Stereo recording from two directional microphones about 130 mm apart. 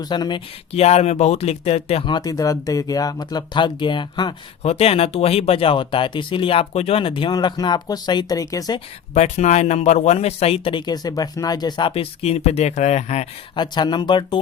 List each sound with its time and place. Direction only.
0.0 s speech: 35° left (ahead or behind)
0.7 s speech: 55° left (ahead or behind)
2.0 s speech: 30° left (ahead or behind)
4.6 s speech: 55° left (ahead or behind); by 8.8 s 30° left (ahead or behind)
9.1 s speech: 65° left (ahead or behind); by 11.9 s 30° left (ahead or behind)
11.9 s speech: 50° left (ahead or behind)
13.6 s speech: 35° left (ahead or behind)